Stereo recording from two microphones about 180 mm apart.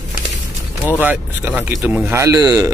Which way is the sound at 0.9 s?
10° right (ahead or behind).